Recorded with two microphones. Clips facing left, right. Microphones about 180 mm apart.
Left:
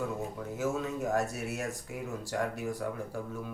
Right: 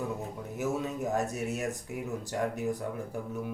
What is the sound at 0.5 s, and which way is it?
Speech, 20° right (ahead or behind).